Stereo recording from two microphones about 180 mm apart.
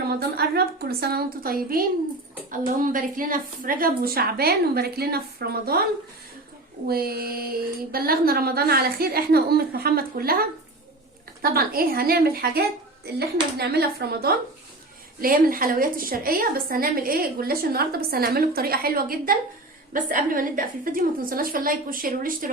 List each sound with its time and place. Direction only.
0.2 s a woman's voice: 60° right (ahead or behind)
6.8 s a woman's voice: 60° right (ahead or behind)
11.4 s a woman's voice: 55° right (ahead or behind)